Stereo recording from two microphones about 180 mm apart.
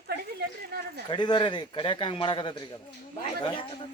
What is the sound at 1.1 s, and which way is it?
Speech, 25° left (ahead or behind).